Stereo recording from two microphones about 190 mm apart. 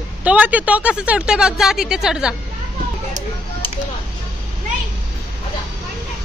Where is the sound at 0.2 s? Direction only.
5° right (ahead or behind).